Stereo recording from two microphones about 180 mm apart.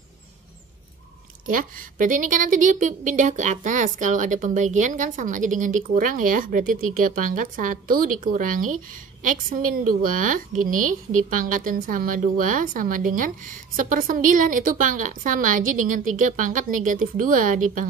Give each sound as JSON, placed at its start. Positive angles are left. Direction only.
{"t": 1.5, "sound": "a woman's voice", "side_deg": -50}